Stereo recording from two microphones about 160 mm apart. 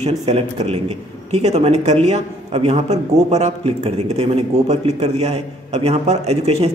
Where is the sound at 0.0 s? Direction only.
40° right (ahead or behind).